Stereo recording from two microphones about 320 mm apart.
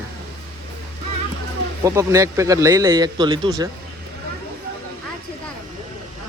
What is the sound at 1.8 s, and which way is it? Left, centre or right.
A man's voice, centre.